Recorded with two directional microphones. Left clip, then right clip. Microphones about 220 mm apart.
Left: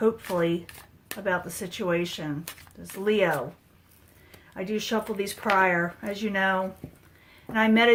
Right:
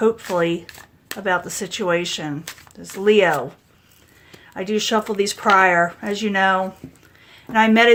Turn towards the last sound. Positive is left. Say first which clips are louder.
# right 7 dB
turn(degrees=-40)  # may be behind; listen again after turning